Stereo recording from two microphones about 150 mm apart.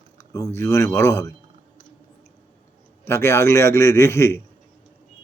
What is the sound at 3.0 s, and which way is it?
A man's voice, 15° left (ahead or behind).